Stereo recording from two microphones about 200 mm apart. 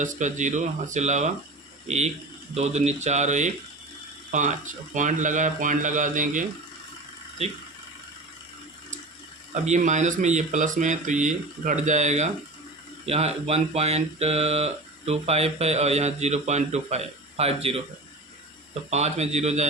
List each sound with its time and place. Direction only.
0.0 s speech: 40° right (ahead or behind)
2.6 s speech: 35° right (ahead or behind)
9.6 s speech: 35° right (ahead or behind)